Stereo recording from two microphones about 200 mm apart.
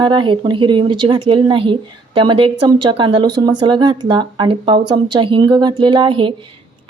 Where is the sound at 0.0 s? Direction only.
25° right (ahead or behind).